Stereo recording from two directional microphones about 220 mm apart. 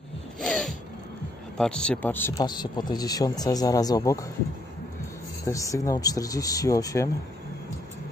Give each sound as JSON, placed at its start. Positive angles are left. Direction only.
{"t": 0.4, "sound": "a sound", "side_deg": 5}
{"t": 1.6, "sound": "speech", "side_deg": 5}
{"t": 5.4, "sound": "speech", "side_deg": 15}